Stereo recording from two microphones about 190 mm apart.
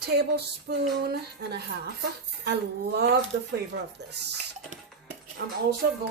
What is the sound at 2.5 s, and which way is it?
Speech, 60° right (ahead or behind).